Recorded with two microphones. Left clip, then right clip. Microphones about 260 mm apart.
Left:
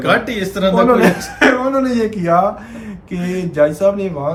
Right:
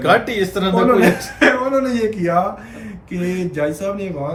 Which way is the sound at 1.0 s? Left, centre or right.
Centre.